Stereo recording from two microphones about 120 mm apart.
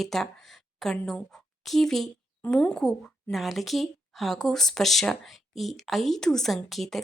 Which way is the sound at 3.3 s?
Centre (ahead or behind).